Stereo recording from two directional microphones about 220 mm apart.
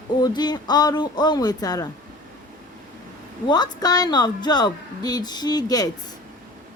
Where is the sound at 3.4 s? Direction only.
20° left (ahead or behind).